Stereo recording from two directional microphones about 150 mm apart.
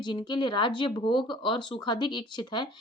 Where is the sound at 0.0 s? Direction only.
30° left (ahead or behind).